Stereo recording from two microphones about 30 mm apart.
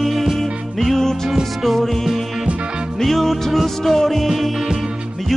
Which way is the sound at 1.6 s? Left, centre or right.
Centre.